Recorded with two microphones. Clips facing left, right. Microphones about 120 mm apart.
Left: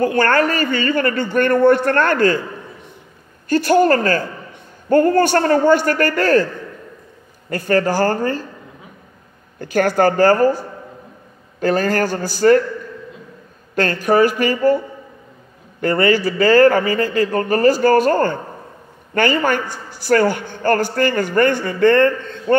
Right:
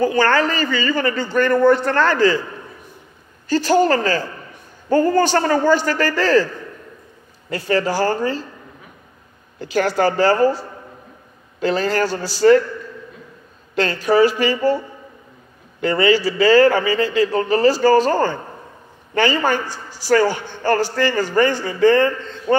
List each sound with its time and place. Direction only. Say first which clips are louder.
0.0 s speech: left 1 dB; 55° left (ahead or behind)
3.4 s speech: left 2 dB; 55° left (ahead or behind)
9.6 s speech: left 2 dB; 50° left (ahead or behind)
13.7 s speech: left 1 dB; 50° left (ahead or behind)
15.8 s speech: even; 50° left (ahead or behind)